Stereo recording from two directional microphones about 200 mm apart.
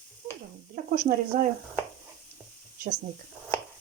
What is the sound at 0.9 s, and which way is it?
Speech, 45° right (ahead or behind).